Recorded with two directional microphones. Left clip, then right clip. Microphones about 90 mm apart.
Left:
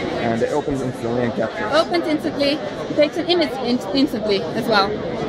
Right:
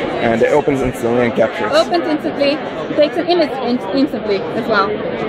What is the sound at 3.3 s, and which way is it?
A woman's voice, 10° left (ahead or behind).